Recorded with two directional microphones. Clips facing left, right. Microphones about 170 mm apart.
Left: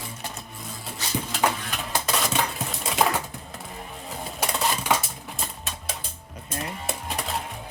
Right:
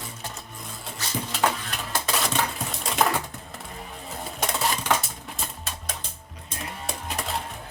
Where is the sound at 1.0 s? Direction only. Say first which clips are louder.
Left 1 dB; 15° left (ahead or behind).